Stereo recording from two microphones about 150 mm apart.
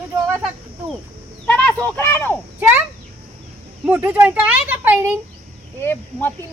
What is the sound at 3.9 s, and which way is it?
Speech, 10° right (ahead or behind).